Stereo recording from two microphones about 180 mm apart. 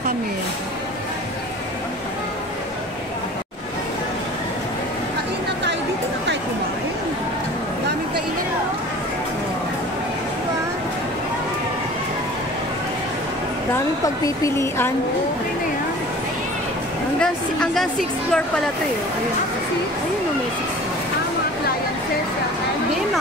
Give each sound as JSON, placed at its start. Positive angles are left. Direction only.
{"t": 14.0, "sound": "speech", "side_deg": 20}
{"t": 17.2, "sound": "a woman's voice", "side_deg": 5}